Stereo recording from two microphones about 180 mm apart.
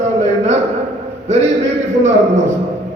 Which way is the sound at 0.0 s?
40° right (ahead or behind).